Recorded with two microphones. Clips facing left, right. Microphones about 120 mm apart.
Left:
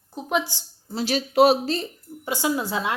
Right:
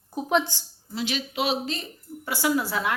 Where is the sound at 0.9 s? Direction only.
40° left (ahead or behind).